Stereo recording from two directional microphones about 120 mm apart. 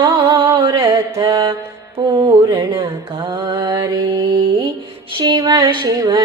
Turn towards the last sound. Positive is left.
turn(degrees=-30)  # may be behind; listen again after turning